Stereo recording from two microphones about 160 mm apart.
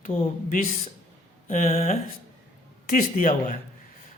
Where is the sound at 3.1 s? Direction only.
50° left (ahead or behind).